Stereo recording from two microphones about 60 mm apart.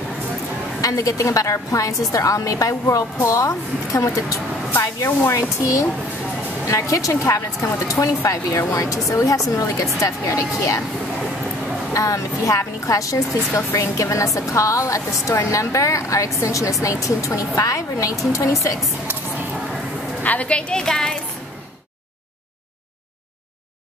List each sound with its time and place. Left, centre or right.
0.7 s a woman's voice: left
11.9 s a woman's voice: left
20.2 s a woman's voice: left